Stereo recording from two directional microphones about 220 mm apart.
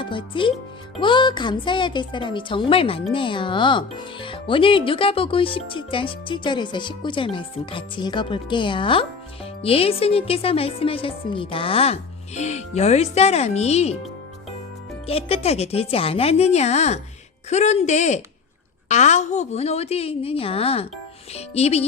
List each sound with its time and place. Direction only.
0.0 s speech: 20° left (ahead or behind)
15.0 s speech: 25° left (ahead or behind)